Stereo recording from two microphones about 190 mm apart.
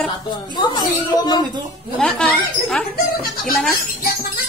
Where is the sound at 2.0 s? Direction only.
5° left (ahead or behind).